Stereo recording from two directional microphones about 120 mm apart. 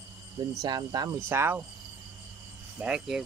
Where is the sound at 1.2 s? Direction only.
20° right (ahead or behind).